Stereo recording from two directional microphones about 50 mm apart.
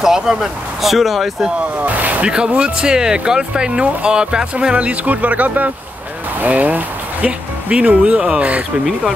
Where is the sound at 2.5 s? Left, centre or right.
Centre.